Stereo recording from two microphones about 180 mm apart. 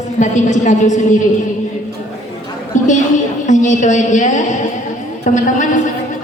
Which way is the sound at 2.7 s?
45° left (ahead or behind).